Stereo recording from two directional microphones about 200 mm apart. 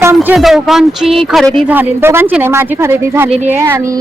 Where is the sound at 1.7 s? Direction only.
10° right (ahead or behind).